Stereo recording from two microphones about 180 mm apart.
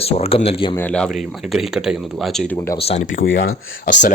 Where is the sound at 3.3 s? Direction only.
90° left.